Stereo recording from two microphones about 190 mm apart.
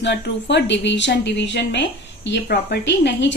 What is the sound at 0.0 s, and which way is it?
A woman's voice, 65° left (ahead or behind).